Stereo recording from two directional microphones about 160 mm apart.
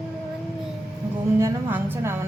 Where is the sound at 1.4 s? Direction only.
15° right (ahead or behind).